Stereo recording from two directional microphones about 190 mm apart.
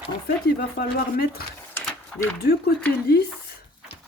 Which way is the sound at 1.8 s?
5° left (ahead or behind).